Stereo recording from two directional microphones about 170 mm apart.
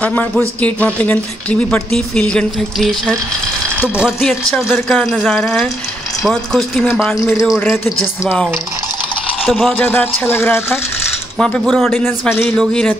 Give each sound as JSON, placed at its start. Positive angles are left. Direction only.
{"t": 0.0, "sound": "speech", "side_deg": 10}
{"t": 7.2, "sound": "speech", "side_deg": 20}
{"t": 7.4, "sound": "speech", "side_deg": 0}
{"t": 7.7, "sound": "speech", "side_deg": 15}
{"t": 9.5, "sound": "speech", "side_deg": 0}
{"t": 9.8, "sound": "speech", "side_deg": 10}
{"t": 12.0, "sound": "speech", "side_deg": 15}